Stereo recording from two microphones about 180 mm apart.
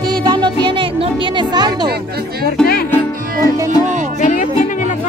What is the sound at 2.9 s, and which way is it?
Music, 20° left (ahead or behind).